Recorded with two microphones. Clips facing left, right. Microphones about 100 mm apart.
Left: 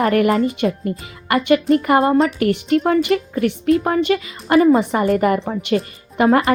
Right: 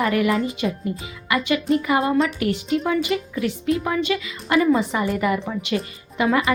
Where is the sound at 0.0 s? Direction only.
50° left (ahead or behind).